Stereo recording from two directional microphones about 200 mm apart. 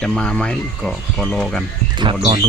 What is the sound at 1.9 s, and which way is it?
Speech, 20° right (ahead or behind).